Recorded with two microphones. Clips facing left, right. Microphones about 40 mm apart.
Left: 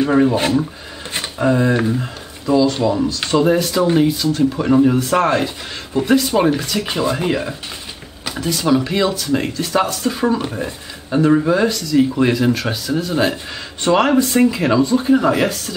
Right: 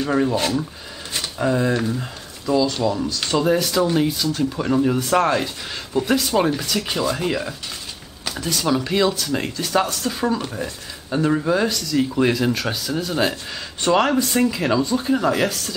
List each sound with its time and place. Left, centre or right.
0.0 s speech: centre
4.1 s speech: centre